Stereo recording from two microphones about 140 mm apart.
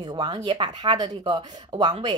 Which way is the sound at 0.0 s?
30° right (ahead or behind).